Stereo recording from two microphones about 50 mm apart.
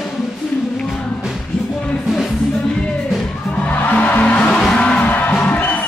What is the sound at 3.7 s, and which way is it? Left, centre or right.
Music, left.